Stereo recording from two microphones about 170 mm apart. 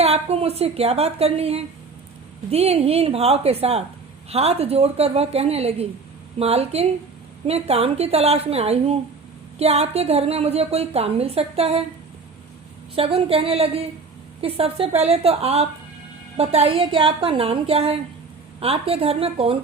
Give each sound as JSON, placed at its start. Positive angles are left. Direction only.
{"t": 0.0, "sound": "a woman's voice", "side_deg": -40}
{"t": 13.0, "sound": "a woman's voice", "side_deg": -35}